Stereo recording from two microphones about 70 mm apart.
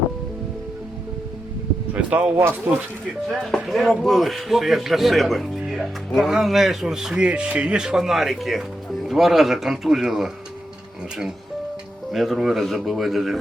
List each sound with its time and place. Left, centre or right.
1.9 s a sound: right
2.7 s speech: right
3.2 s speech: centre
12.1 s speech: centre